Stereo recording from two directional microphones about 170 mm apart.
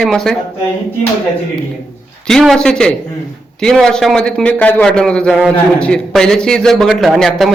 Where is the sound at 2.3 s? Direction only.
5° left (ahead or behind).